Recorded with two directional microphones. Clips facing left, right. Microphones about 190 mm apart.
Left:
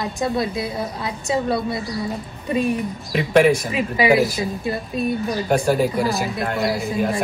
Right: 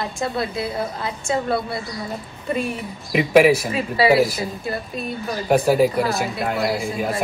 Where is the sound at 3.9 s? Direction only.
20° left (ahead or behind).